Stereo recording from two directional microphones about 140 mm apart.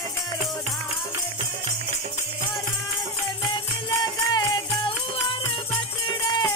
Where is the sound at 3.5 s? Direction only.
30° left (ahead or behind).